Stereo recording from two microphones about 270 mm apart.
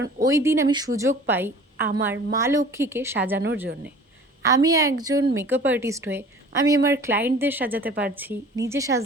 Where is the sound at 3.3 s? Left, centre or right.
Right.